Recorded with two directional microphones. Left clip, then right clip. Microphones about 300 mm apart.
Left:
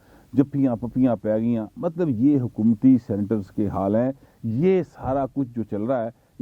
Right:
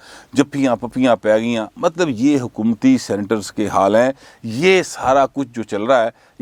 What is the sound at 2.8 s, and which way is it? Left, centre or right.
A man's voice, centre.